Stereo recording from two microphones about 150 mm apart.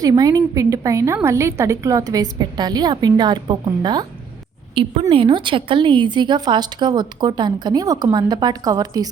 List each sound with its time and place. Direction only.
0.0 s a woman's voice: 25° right (ahead or behind)